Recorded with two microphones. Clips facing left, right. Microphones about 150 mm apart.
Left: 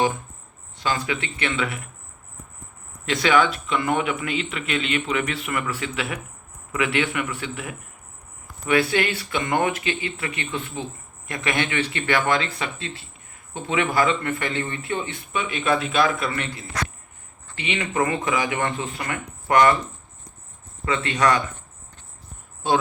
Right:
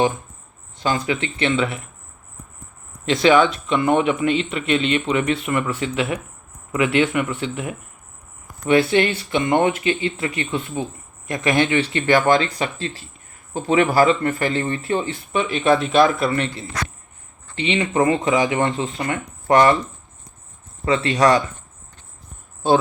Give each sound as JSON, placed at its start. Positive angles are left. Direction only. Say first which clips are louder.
{"t": 0.8, "sound": "a man's voice", "louder": "right 4 dB", "side_deg": -30}
{"t": 3.1, "sound": "a man's voice", "louder": "right 5 dB", "side_deg": -25}
{"t": 17.5, "sound": "a man's voice", "louder": "right 6 dB", "side_deg": -25}
{"t": 20.8, "sound": "a man's voice", "louder": "right 5 dB", "side_deg": -35}